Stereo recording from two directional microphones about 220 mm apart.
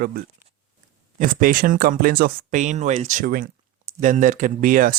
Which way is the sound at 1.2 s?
40° right (ahead or behind).